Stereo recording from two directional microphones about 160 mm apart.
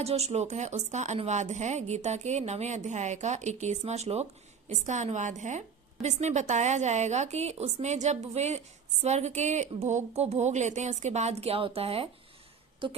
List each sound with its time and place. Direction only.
0.0 s a woman's voice: 40° right (ahead or behind)